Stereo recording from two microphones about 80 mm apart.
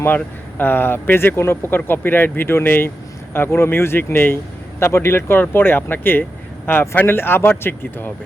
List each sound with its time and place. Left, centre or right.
0.6 s speech: left